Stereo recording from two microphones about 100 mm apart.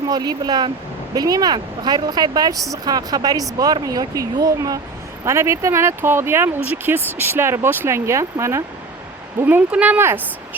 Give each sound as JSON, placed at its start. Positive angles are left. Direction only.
{"t": 0.1, "sound": "speech", "side_deg": -40}